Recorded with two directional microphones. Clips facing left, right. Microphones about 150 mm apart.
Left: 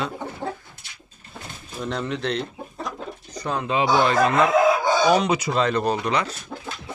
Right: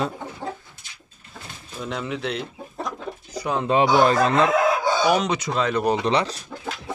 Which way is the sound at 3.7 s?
40° right (ahead or behind).